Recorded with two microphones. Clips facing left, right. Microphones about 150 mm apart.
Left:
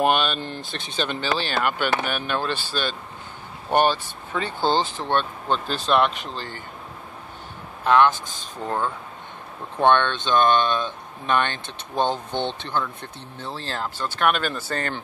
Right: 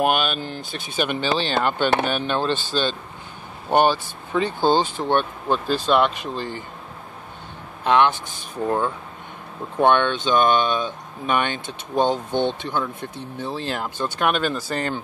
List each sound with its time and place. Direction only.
0.0 s speech: 5° right (ahead or behind); by 2.6 s 25° right (ahead or behind)
3.7 s speech: 15° right (ahead or behind)
7.8 s speech: 20° right (ahead or behind)